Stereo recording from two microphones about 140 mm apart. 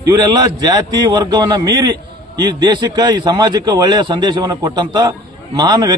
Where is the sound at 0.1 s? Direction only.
30° right (ahead or behind).